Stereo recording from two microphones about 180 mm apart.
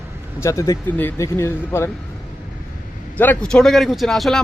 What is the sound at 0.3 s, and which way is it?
Speech, 15° left (ahead or behind).